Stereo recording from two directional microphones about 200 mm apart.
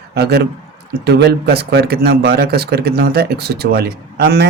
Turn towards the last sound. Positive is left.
turn(degrees=-50)  # may be behind; listen again after turning